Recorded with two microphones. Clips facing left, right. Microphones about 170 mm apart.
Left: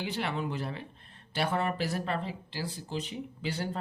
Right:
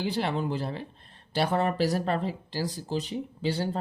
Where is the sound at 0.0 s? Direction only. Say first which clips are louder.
Right 5 dB; 35° right (ahead or behind).